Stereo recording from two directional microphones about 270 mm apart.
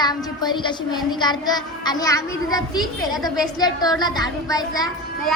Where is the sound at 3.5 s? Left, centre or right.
Centre.